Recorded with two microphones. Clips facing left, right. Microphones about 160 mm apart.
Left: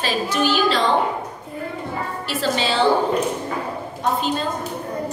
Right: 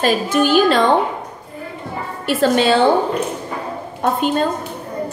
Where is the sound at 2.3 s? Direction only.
55° right (ahead or behind).